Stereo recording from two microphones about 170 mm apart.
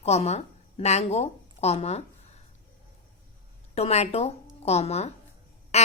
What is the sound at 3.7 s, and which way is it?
A woman's voice, 40° left (ahead or behind).